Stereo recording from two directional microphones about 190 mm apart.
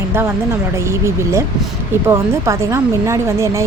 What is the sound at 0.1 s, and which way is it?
A woman's voice, 10° right (ahead or behind).